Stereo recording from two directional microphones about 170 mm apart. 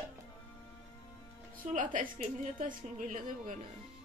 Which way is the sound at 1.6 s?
50° right (ahead or behind).